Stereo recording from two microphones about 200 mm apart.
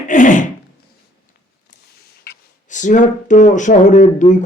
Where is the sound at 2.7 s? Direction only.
40° left (ahead or behind).